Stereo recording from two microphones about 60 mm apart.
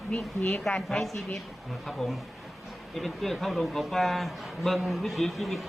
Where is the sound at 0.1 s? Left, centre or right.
Left.